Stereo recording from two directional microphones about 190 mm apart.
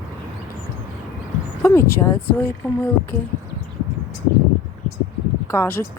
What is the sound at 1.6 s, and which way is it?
Speech, 15° left (ahead or behind).